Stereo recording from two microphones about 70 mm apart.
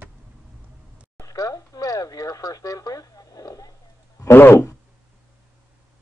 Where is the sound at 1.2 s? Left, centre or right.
Left.